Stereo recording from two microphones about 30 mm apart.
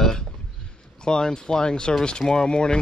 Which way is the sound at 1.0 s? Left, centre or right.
Left.